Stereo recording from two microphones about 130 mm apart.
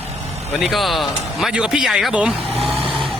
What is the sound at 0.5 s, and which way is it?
A man's voice, centre (ahead or behind).